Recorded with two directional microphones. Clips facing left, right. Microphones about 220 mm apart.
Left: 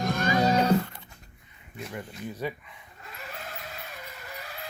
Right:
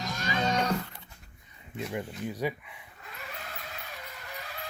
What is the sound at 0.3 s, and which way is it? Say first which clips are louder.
Neigh: left 5 dB; 30° left (ahead or behind).